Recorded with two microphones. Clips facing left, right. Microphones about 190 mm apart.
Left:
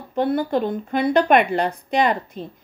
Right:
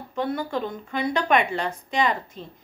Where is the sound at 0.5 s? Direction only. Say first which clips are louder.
Left 7 dB; 55° left (ahead or behind).